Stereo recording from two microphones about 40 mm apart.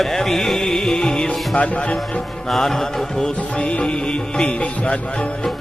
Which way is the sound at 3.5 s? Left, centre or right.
Left.